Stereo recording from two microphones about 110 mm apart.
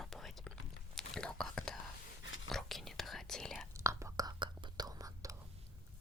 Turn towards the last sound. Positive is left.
turn(degrees=-30)  # may be behind; listen again after turning